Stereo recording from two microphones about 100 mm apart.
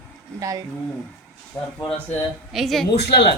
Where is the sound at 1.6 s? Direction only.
15° left (ahead or behind).